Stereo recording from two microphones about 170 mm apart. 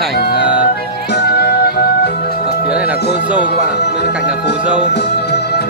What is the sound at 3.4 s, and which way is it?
Speech, 80° left.